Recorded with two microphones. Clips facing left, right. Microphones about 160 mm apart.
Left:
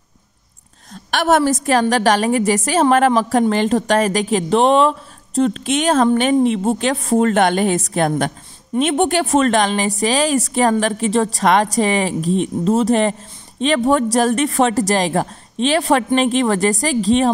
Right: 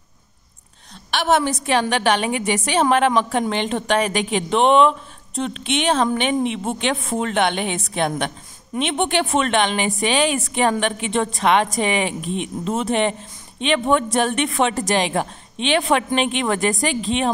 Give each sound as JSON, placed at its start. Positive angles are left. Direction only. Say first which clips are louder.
{"t": 0.9, "sound": "a woman's voice", "louder": "left 3 dB", "side_deg": 45}